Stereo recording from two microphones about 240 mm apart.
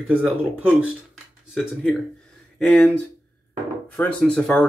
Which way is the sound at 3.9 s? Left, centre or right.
Centre.